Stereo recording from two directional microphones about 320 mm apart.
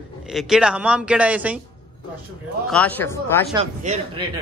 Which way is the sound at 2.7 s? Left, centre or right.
Centre.